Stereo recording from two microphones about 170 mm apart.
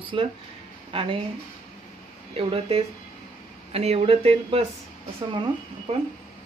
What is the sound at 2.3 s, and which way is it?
Speech, 35° right (ahead or behind).